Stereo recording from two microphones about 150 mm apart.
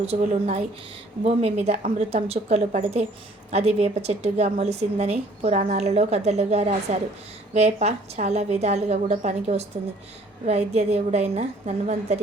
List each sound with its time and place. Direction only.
0.0 s a woman's voice: 50° right (ahead or behind)